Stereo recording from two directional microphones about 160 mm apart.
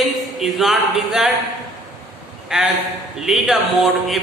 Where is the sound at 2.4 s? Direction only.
5° right (ahead or behind).